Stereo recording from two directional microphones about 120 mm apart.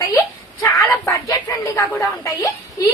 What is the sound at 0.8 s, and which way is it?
A woman's voice, 25° left (ahead or behind).